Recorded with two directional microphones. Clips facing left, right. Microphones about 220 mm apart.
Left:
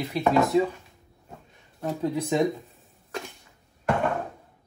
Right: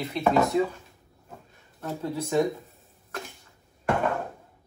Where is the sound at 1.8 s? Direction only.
15° left (ahead or behind).